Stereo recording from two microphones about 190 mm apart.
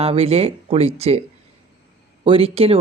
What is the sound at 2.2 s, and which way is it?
Speech, 30° right (ahead or behind).